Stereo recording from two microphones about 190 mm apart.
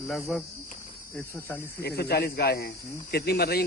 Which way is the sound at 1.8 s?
55° left (ahead or behind).